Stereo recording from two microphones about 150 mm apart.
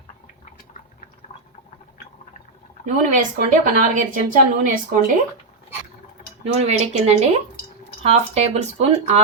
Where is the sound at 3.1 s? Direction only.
60° right (ahead or behind).